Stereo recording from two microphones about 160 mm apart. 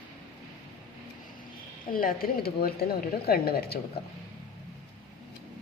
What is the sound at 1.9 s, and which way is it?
Speech, 65° left (ahead or behind).